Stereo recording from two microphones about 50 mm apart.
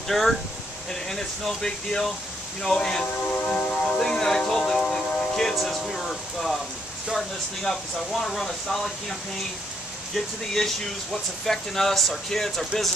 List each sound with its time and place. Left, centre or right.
0.1 s speech: centre; by 3.6 s left
3.8 s music: centre
5.7 s speech: centre
10.1 s speech: centre